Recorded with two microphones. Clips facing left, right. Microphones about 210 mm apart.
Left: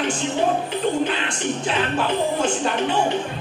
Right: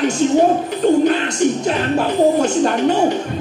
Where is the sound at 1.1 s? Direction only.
45° right (ahead or behind).